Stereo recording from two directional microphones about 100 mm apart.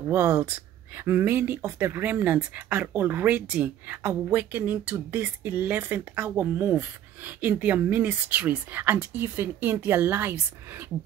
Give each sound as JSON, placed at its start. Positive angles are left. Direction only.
{"t": 0.1, "sound": "speech", "side_deg": -25}